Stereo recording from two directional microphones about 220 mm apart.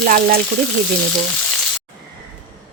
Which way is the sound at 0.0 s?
40° right (ahead or behind).